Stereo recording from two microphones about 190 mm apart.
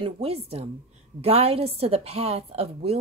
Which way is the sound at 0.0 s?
30° right (ahead or behind).